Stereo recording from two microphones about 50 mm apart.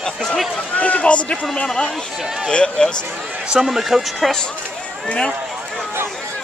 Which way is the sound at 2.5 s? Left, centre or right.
Centre.